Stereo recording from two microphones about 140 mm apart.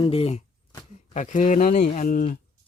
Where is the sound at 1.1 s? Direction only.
60° left (ahead or behind).